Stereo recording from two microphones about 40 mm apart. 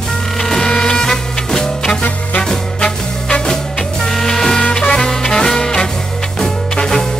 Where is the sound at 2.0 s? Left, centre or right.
Left.